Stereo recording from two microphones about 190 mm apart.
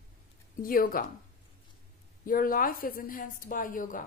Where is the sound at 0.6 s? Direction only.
50° left (ahead or behind).